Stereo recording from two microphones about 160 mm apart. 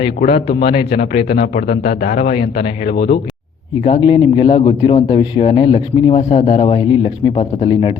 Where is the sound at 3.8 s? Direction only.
35° left (ahead or behind).